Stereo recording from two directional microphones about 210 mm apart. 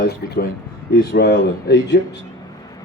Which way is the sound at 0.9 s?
50° left (ahead or behind).